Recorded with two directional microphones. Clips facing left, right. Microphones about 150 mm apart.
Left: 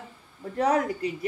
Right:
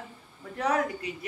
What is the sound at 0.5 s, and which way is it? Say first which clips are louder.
Speech: left 4 dB; 35° left (ahead or behind).